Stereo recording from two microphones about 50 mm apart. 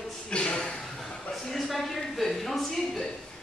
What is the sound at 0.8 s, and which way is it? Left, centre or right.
Chuckle, centre.